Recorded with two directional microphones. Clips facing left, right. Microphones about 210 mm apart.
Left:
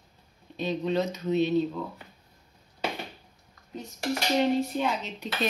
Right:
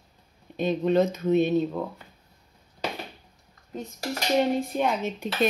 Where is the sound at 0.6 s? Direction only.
50° right (ahead or behind).